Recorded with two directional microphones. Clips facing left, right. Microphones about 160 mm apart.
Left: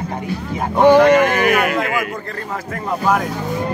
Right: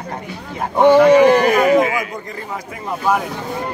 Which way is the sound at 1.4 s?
65° left (ahead or behind).